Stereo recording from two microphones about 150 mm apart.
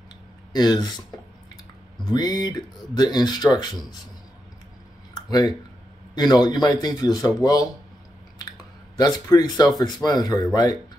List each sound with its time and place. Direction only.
0.5 s speech: 25° left (ahead or behind)
2.0 s speech: 25° left (ahead or behind)
5.1 s a sound: 25° left (ahead or behind)
6.1 s speech: 30° left (ahead or behind)
8.9 s speech: 25° left (ahead or behind)